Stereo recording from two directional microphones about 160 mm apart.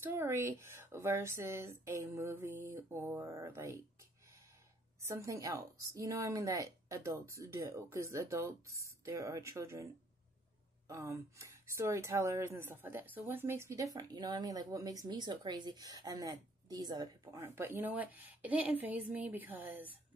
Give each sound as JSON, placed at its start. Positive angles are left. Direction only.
{"t": 0.0, "sound": "speech", "side_deg": -15}
{"t": 5.0, "sound": "a woman's voice", "side_deg": -20}
{"t": 10.9, "sound": "a woman's voice", "side_deg": -20}